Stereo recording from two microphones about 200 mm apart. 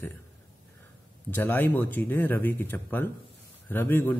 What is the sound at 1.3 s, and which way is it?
A man's voice, 10° left (ahead or behind).